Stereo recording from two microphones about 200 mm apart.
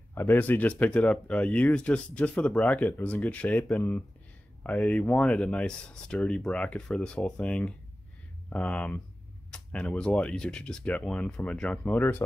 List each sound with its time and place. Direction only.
0.1 s speech: 10° left (ahead or behind)